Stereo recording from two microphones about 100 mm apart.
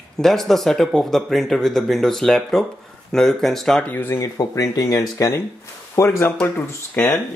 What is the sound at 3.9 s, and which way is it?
Speech, 20° left (ahead or behind).